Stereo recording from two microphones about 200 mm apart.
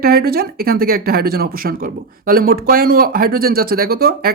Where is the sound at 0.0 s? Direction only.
50° right (ahead or behind).